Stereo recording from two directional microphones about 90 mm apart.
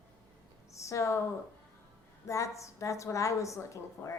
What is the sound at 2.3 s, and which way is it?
A woman's voice, 35° left (ahead or behind).